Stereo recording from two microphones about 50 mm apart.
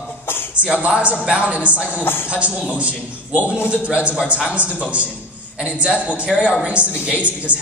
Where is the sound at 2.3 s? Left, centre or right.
Right.